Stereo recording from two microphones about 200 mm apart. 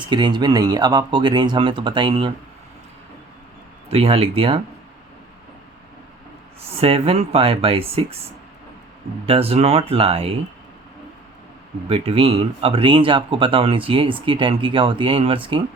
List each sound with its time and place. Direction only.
0.1 s speech: 25° right (ahead or behind)
3.8 s speech: 30° right (ahead or behind)
6.7 s speech: 30° right (ahead or behind)
9.2 s speech: 30° right (ahead or behind)
11.9 s speech: 30° right (ahead or behind)